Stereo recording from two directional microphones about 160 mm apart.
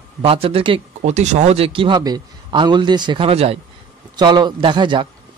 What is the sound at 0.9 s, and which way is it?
A man's voice, 45° right (ahead or behind).